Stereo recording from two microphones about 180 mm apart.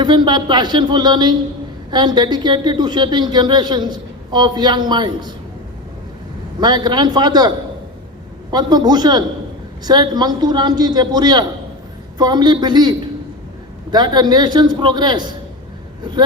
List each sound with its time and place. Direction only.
0.0 s a woman's voice: 25° right (ahead or behind)
6.6 s a woman's voice: 25° right (ahead or behind)